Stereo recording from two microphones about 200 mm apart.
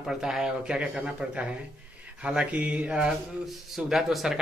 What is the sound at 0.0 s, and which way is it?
A man's voice, centre (ahead or behind).